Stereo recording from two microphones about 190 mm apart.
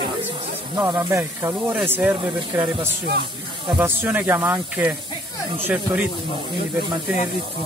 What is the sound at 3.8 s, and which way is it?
Speech, 10° right (ahead or behind).